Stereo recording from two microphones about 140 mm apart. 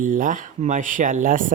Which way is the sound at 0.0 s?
70° right (ahead or behind).